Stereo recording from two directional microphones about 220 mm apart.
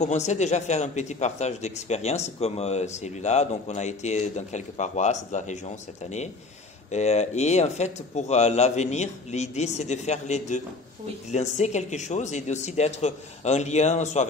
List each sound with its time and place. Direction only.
0.0 s a man's voice: 30° left (ahead or behind)
6.9 s a man's voice: 30° left (ahead or behind)